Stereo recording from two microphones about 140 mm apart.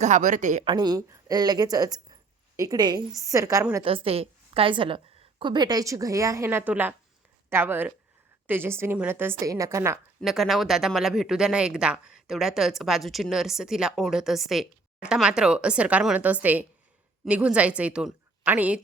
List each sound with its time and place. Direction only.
0.0 s a woman's voice: 60° right (ahead or behind)
0.6 s a woman's voice: 35° right (ahead or behind)
3.8 s a woman's voice: 40° right (ahead or behind); by 10.0 s 20° right (ahead or behind)
10.2 s a woman's voice: centre (ahead or behind)